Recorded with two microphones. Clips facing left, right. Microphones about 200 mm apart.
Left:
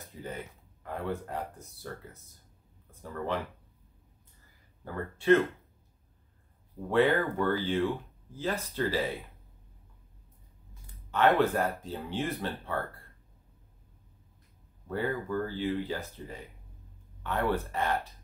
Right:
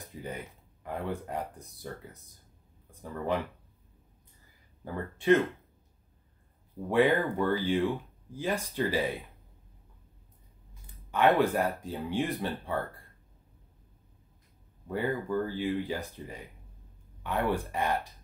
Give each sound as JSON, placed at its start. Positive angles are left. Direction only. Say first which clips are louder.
{"t": 0.0, "sound": "a sound", "louder": "right 1 dB", "side_deg": -15}
{"t": 0.8, "sound": "speech", "louder": "even", "side_deg": -15}
{"t": 2.9, "sound": "speech", "louder": "right 2 dB", "side_deg": -15}
{"t": 4.8, "sound": "speech", "louder": "even", "side_deg": -15}
{"t": 6.9, "sound": "speech", "louder": "right 1 dB", "side_deg": -15}
{"t": 11.1, "sound": "speech", "louder": "even", "side_deg": -15}
{"t": 14.9, "sound": "speech", "louder": "right 1 dB", "side_deg": -15}